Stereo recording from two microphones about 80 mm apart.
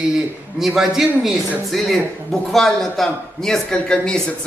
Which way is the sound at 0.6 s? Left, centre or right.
Centre.